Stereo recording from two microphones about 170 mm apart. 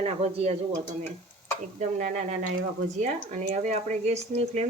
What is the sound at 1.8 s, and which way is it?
Speech, 45° right (ahead or behind).